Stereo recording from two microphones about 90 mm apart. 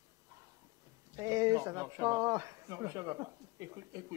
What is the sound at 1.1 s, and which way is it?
Speech, 35° right (ahead or behind).